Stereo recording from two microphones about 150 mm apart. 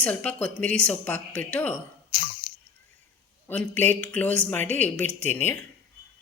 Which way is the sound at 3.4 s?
10° left (ahead or behind).